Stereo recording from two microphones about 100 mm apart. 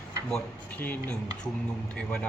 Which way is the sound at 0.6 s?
15° left (ahead or behind).